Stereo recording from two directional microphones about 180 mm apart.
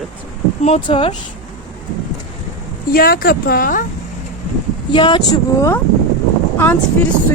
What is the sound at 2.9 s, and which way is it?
Speech, 55° left (ahead or behind).